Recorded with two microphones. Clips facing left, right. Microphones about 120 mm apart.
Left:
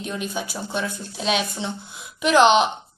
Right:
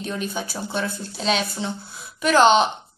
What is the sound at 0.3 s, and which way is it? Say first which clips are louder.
Speech: even; 10° left (ahead or behind).